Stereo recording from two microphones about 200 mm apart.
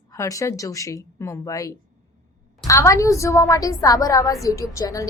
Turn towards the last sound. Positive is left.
turn(degrees=15)  # may be behind; listen again after turning